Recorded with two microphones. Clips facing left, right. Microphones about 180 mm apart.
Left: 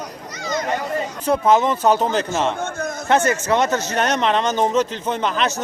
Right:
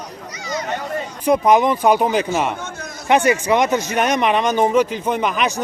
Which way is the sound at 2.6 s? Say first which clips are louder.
Left 6 dB; 50° left (ahead or behind).